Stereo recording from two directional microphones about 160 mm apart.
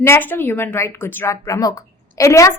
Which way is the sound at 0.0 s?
15° left (ahead or behind).